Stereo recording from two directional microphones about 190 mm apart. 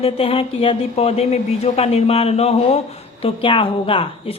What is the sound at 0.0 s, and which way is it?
Speech, 30° left (ahead or behind).